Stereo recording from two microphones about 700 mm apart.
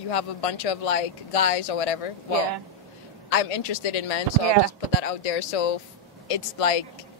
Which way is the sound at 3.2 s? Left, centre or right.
Left.